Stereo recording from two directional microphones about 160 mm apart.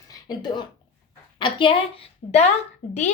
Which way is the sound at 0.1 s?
25° left (ahead or behind).